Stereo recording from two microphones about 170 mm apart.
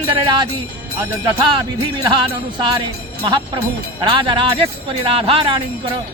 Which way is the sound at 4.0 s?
30° right (ahead or behind).